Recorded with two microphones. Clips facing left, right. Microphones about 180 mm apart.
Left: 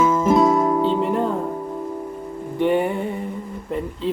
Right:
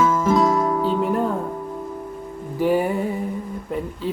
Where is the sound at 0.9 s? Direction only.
Centre (ahead or behind).